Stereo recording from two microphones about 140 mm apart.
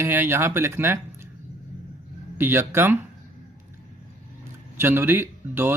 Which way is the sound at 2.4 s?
15° right (ahead or behind).